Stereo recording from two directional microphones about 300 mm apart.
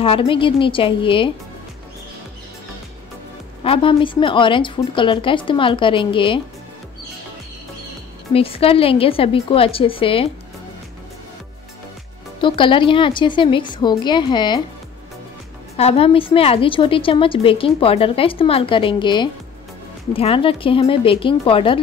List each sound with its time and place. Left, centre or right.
0.0 s a woman's voice: centre
3.6 s a woman's voice: centre
8.3 s a woman's voice: centre
12.4 s a woman's voice: centre
15.7 s a woman's voice: centre